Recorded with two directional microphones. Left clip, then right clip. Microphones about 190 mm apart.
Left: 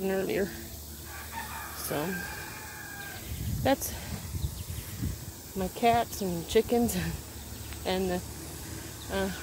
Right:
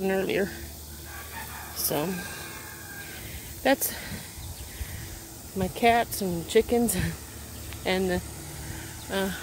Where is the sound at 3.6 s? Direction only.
15° right (ahead or behind).